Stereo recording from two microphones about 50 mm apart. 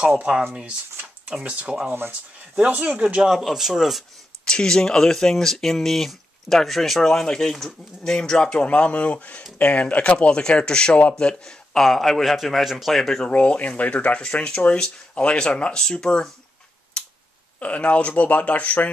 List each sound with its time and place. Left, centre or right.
0.3 s speech: right
1.9 s speech: right
2.5 s speech: right
3.5 s speech: centre
4.5 s speech: centre
13.2 s speech: left
17.0 s finger snapping: centre
17.6 s speech: left